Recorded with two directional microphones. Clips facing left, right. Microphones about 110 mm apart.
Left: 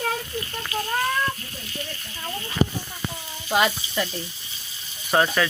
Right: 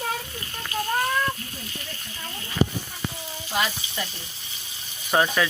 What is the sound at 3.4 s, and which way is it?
Speech, 80° left.